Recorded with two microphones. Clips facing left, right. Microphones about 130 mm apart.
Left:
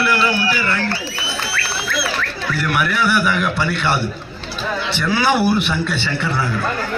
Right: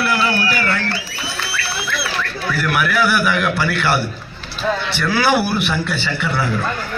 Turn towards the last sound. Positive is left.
turn(degrees=-10)  # may be behind; listen again after turning